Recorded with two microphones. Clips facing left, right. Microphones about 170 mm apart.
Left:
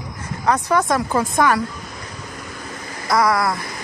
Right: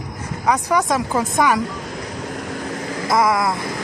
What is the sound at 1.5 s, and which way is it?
Vehicle, 90° right.